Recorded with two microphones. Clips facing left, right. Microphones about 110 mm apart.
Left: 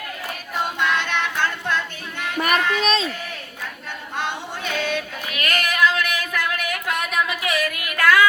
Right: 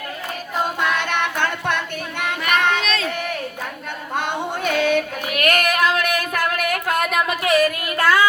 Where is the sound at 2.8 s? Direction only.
30° left (ahead or behind).